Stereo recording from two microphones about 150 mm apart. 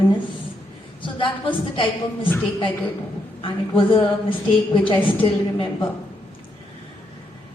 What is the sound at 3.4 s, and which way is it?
Speech, 35° left (ahead or behind).